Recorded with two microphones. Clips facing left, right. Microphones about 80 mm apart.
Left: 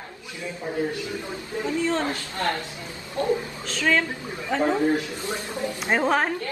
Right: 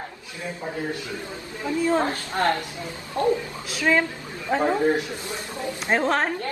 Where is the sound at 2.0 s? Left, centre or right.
Right.